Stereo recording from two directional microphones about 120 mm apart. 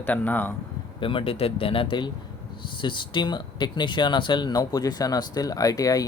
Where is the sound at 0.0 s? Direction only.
15° left (ahead or behind).